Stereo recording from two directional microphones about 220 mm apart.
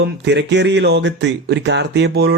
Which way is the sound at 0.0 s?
50° right (ahead or behind).